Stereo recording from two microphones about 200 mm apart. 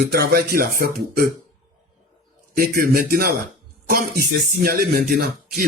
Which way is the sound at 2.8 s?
45° right (ahead or behind).